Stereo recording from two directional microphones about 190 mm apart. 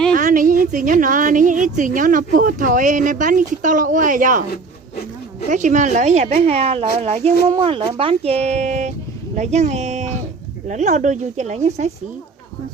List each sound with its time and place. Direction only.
0.1 s a woman's voice: 45° right (ahead or behind)
5.5 s a woman's voice: 40° right (ahead or behind)